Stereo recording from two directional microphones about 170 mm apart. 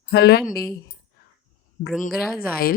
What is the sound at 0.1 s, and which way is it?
Speech, 70° left (ahead or behind).